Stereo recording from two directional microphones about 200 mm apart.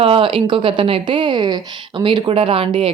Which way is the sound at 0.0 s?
25° right (ahead or behind).